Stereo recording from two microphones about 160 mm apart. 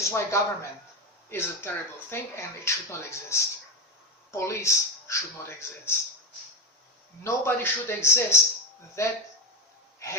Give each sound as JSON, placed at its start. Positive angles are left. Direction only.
{"t": 0.0, "sound": "speech", "side_deg": 15}
{"t": 7.3, "sound": "speech", "side_deg": 15}